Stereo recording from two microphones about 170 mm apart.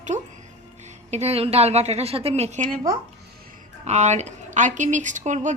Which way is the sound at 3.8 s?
40° right (ahead or behind).